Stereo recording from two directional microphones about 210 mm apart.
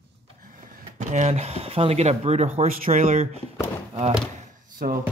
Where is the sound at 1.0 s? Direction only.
35° right (ahead or behind).